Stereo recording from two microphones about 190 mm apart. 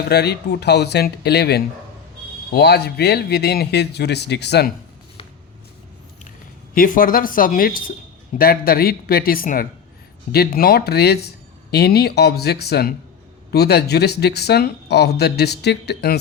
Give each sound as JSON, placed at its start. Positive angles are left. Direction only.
{"t": 0.1, "sound": "speech", "side_deg": 60}
{"t": 6.7, "sound": "speech", "side_deg": 45}